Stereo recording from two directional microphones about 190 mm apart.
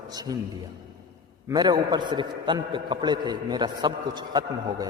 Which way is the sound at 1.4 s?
20° right (ahead or behind).